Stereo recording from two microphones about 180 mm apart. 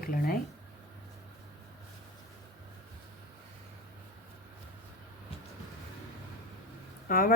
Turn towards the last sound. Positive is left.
turn(degrees=50)  # may be behind; listen again after turning